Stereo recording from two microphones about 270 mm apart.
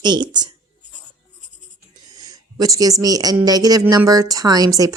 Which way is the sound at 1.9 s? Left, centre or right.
Centre.